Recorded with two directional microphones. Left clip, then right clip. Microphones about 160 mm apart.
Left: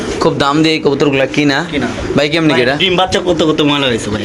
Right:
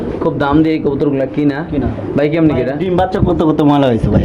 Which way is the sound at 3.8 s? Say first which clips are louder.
Right 1 dB; 40° right (ahead or behind).